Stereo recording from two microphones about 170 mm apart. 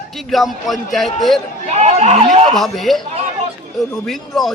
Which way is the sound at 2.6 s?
Centre (ahead or behind).